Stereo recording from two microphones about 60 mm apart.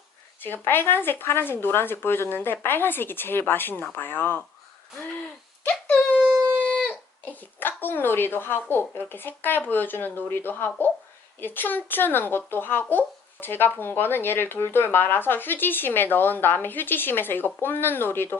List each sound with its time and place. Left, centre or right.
0.4 s speech: left
6.7 s a sound: left
7.6 s speech: left